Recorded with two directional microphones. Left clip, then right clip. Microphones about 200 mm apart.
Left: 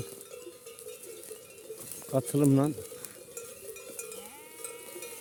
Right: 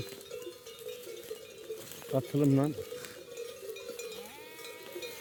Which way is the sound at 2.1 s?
30° left (ahead or behind).